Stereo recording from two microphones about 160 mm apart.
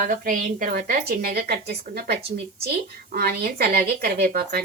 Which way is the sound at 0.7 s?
70° right (ahead or behind).